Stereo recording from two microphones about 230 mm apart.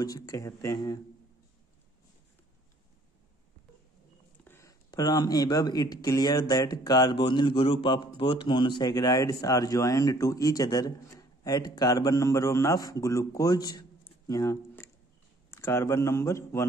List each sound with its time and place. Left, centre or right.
0.0 s speech: centre
4.5 s speech: centre